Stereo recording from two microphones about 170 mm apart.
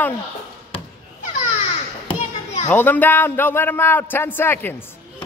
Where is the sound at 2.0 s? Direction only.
40° left (ahead or behind).